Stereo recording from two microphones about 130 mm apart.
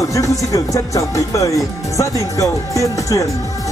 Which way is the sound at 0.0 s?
25° left (ahead or behind).